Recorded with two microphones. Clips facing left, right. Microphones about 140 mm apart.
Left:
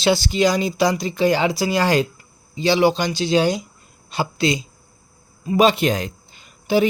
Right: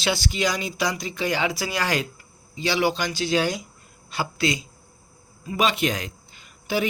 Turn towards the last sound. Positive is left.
turn(degrees=25)  # may be behind; listen again after turning